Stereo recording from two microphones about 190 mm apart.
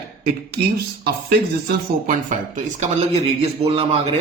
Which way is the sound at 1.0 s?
55° right (ahead or behind).